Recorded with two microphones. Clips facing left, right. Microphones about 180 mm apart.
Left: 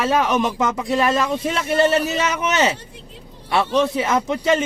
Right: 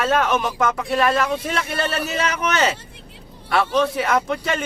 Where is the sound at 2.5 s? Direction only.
15° left (ahead or behind).